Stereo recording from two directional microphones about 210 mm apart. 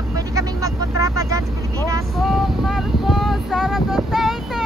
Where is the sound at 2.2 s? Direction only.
Centre (ahead or behind).